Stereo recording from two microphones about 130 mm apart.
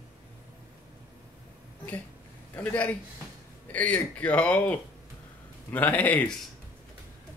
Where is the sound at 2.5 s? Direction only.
15° left (ahead or behind).